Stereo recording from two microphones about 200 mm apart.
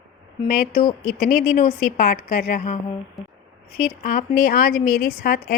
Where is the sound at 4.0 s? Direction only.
45° left (ahead or behind).